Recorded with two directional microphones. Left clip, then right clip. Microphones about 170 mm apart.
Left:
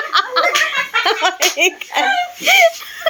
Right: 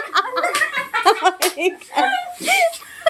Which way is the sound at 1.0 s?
5° right (ahead or behind).